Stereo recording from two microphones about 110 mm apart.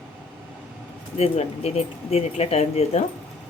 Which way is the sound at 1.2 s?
70° left (ahead or behind).